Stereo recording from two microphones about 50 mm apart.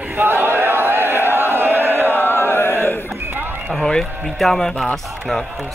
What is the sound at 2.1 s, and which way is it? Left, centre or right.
Music, left.